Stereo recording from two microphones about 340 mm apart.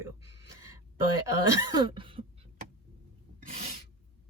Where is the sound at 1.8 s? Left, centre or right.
Centre.